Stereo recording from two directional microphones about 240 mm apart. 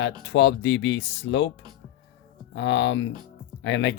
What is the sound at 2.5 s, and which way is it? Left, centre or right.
Speech, left.